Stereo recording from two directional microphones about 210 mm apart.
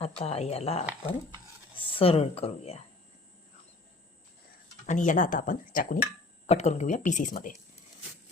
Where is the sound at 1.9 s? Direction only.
25° left (ahead or behind).